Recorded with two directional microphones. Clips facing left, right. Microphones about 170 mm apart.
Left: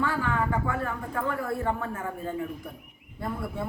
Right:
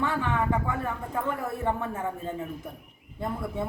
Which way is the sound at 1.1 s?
20° right (ahead or behind).